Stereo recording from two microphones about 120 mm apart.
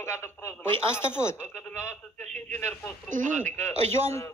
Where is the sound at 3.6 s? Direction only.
20° left (ahead or behind).